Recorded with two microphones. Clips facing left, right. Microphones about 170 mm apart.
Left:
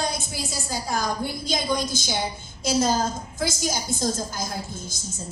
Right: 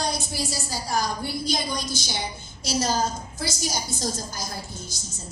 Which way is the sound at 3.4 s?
50° left (ahead or behind).